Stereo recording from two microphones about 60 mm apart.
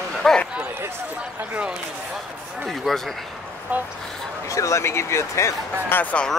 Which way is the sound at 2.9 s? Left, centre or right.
Centre.